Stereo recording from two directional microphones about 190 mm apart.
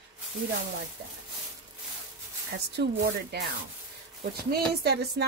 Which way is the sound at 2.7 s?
60° right (ahead or behind).